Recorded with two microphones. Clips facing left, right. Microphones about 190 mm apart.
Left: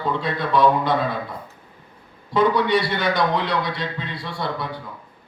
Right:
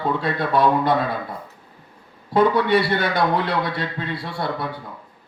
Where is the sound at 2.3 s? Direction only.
55° right (ahead or behind).